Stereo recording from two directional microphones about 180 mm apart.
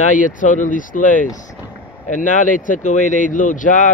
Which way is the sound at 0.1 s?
45° left (ahead or behind).